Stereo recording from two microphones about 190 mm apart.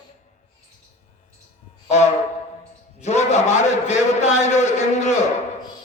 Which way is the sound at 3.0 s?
35° left (ahead or behind).